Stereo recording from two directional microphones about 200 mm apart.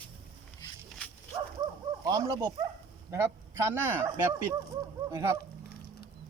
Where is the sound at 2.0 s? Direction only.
20° right (ahead or behind).